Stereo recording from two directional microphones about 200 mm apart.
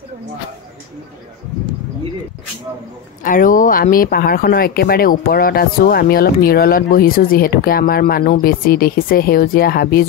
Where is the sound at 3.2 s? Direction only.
45° left (ahead or behind).